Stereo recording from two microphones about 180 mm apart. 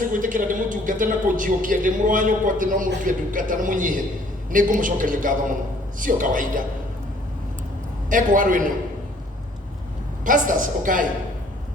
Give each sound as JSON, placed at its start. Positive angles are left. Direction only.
{"t": 0.0, "sound": "a woman's voice", "side_deg": -50}
{"t": 8.1, "sound": "a woman's voice", "side_deg": -50}
{"t": 10.2, "sound": "a woman's voice", "side_deg": -45}